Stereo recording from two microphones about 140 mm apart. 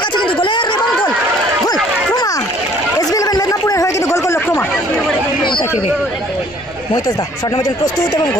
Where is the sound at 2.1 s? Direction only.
25° left (ahead or behind).